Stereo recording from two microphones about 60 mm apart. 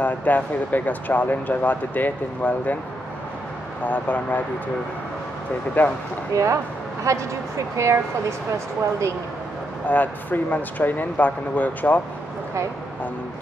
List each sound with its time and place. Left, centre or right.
0.0 s speech: left
3.8 s speech: left
5.8 s speech: left
6.3 s speech: right
9.8 s speech: left